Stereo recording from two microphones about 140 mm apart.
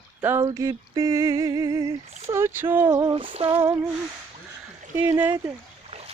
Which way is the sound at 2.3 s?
15° right (ahead or behind).